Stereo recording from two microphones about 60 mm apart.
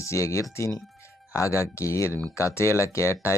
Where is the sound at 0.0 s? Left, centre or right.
Left.